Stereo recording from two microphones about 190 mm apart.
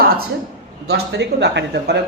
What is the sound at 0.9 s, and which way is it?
A man's voice, 60° right (ahead or behind).